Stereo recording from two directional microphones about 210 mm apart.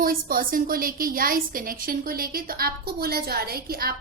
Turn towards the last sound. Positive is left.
turn(degrees=-45)  # may be behind; listen again after turning